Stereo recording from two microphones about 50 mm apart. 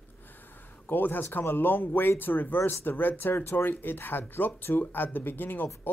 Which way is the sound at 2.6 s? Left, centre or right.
Left.